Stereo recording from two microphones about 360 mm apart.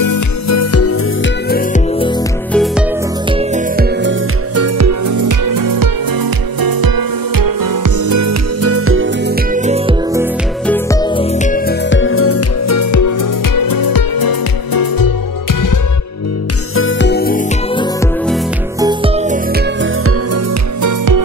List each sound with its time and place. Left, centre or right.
0.0 s music: left
1.5 s music: centre
2.5 s music: centre
3.3 s music: centre
4.6 s music: right; by 10.2 s centre
10.7 s music: centre; by 15.1 s left
16.7 s music: left
18.8 s music: centre
20.8 s music: right